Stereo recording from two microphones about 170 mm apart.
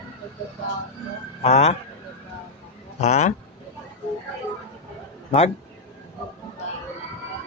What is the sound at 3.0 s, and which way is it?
Speech, 40° left (ahead or behind).